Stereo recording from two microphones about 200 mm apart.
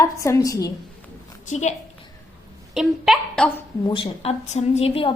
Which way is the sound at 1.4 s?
35° left (ahead or behind).